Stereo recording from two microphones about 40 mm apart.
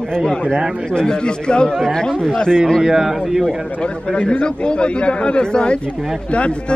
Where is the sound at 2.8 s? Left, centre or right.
Centre.